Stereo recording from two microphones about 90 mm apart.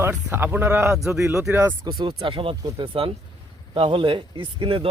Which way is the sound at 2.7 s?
90° right.